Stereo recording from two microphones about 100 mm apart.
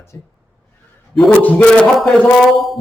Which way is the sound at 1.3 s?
15° left (ahead or behind).